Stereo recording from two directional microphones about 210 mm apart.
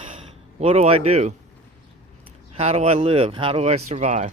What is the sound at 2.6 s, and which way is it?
Speech, 30° right (ahead or behind).